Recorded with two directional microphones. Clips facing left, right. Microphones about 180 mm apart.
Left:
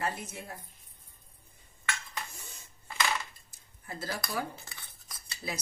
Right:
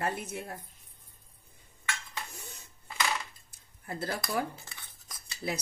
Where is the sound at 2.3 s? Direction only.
60° right (ahead or behind).